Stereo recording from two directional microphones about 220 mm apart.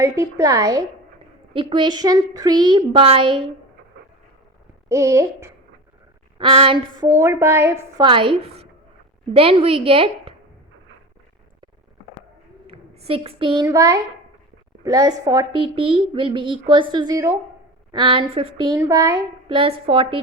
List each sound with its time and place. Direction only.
0.0 s a woman's voice: 15° right (ahead or behind)
4.9 s a woman's voice: 15° right (ahead or behind)
6.4 s a woman's voice: 25° right (ahead or behind)
12.6 s a woman's voice: 25° right (ahead or behind)